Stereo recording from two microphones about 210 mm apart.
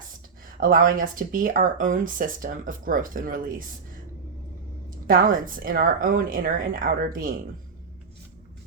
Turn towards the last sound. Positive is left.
turn(degrees=-40)  # may be behind; listen again after turning